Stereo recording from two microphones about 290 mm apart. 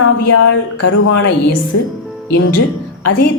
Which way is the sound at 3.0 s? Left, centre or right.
Left.